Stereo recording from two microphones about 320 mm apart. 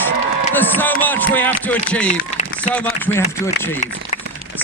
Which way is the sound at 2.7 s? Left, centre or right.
Centre.